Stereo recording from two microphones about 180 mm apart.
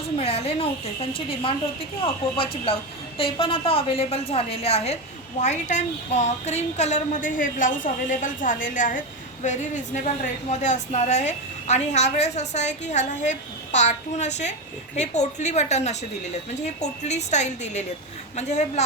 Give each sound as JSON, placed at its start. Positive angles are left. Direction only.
{"t": 0.2, "sound": "a woman's voice", "side_deg": 35}